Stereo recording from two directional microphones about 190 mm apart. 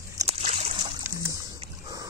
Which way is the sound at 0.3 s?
30° right (ahead or behind).